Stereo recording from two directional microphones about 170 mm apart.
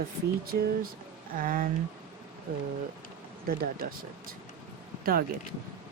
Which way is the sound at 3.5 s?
60° right (ahead or behind).